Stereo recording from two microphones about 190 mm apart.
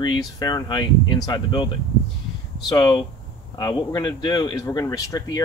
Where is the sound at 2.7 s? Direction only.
20° left (ahead or behind).